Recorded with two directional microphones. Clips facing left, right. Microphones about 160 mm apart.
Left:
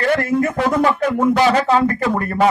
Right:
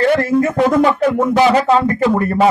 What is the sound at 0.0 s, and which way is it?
Speech, 25° right (ahead or behind).